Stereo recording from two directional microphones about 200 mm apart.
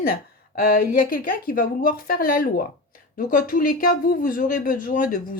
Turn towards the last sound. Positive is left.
turn(degrees=45)  # may be behind; listen again after turning